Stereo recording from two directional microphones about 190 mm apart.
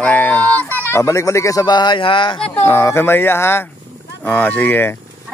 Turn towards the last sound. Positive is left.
turn(degrees=10)  # may be behind; listen again after turning